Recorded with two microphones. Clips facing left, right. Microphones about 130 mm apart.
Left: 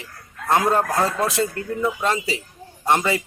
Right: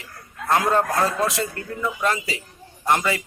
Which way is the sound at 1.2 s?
25° left (ahead or behind).